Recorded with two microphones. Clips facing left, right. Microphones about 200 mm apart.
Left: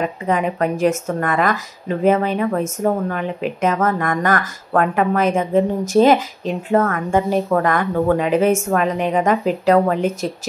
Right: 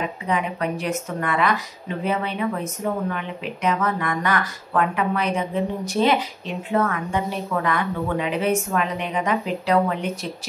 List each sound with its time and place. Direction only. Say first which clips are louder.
0.3 s speech: left 5 dB; 45° left (ahead or behind)